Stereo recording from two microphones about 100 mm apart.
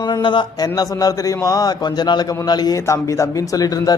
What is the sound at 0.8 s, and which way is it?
Speech, 35° left (ahead or behind).